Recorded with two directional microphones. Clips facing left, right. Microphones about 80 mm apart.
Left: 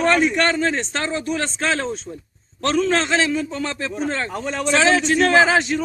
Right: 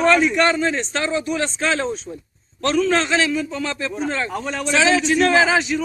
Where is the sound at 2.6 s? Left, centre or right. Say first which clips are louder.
Right 1 dB; left.